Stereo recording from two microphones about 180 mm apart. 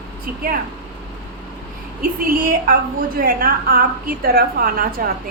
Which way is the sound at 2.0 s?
55° right (ahead or behind).